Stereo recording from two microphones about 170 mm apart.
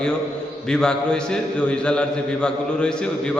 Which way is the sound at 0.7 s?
5° left (ahead or behind).